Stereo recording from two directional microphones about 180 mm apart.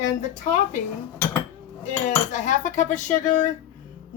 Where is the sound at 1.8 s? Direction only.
40° left (ahead or behind).